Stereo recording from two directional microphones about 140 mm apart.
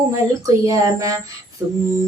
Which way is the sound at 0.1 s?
25° right (ahead or behind).